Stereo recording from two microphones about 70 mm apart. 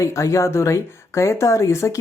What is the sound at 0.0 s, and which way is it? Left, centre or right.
Speech, left.